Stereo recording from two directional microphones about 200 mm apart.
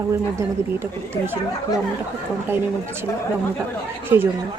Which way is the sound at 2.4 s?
10° right (ahead or behind).